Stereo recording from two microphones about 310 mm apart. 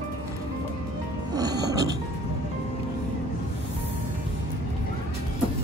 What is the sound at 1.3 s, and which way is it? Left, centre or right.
Music, centre.